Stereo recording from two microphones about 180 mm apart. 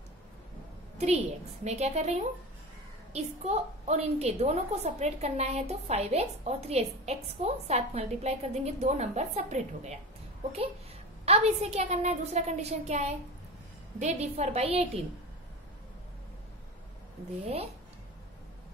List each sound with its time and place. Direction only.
0.9 s a woman's voice: 35° right (ahead or behind)
11.2 s a woman's voice: 35° right (ahead or behind)